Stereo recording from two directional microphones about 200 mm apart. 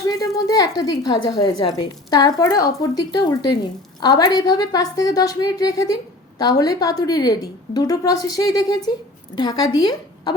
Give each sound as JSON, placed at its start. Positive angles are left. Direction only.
{"t": 0.1, "sound": "a woman's voice", "side_deg": 20}